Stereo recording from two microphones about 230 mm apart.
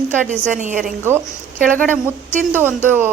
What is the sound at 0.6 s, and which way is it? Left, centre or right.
Speech, right.